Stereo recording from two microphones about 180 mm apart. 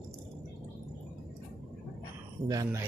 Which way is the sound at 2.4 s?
20° right (ahead or behind).